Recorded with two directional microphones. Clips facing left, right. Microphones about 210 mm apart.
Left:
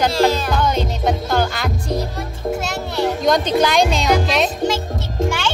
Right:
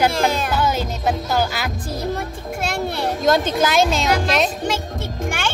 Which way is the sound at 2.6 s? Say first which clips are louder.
Left 1 dB; 55° right (ahead or behind).